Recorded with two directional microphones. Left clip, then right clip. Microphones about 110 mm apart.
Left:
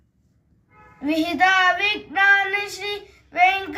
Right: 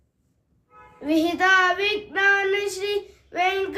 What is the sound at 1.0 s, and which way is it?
Child singing, 35° right (ahead or behind).